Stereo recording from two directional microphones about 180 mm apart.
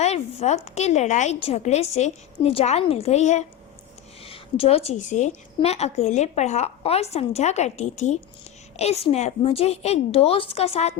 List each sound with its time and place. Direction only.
0.0 s a woman's voice: 35° left (ahead or behind)